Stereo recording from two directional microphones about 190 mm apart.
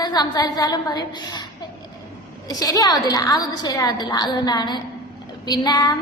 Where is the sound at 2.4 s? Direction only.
20° left (ahead or behind).